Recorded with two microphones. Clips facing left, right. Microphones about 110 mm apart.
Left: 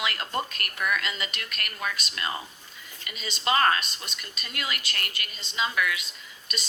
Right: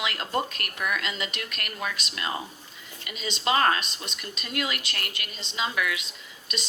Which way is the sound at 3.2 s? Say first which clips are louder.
Right 2 dB; centre (ahead or behind).